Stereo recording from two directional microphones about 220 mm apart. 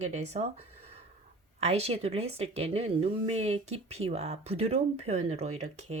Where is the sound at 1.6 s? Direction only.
30° right (ahead or behind).